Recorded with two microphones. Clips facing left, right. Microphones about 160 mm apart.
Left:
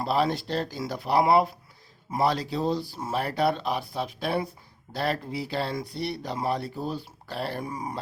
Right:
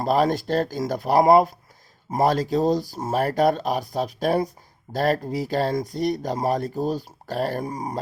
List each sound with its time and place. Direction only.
0.0 s speech: 45° right (ahead or behind)